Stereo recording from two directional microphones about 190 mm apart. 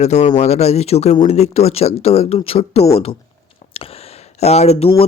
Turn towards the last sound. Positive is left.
turn(degrees=35)  # may be behind; listen again after turning